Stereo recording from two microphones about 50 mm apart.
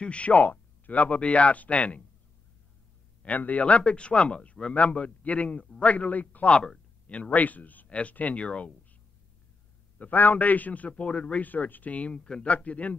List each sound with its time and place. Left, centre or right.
0.0 s speech: left
3.2 s speech: left
6.5 s speech: centre
7.1 s a man's voice: left
9.9 s a man's voice: left